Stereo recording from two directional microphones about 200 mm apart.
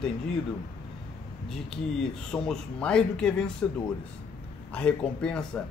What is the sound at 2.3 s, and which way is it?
Speech, 5° left (ahead or behind).